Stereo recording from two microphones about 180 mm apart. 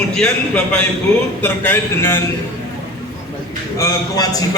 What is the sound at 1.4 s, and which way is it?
Speech, 10° left (ahead or behind).